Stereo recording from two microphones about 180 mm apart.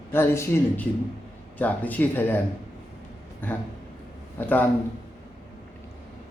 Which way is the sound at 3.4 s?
10° left (ahead or behind).